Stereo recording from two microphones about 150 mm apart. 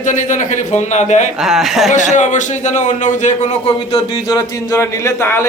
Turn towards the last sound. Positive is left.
turn(degrees=15)  # may be behind; listen again after turning